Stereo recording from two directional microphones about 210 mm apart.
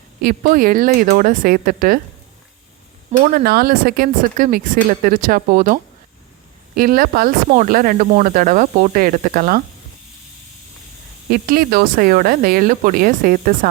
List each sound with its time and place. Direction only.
0.2 s speech: 45° right (ahead or behind)
3.1 s speech: 45° right (ahead or behind)
11.3 s speech: 45° right (ahead or behind)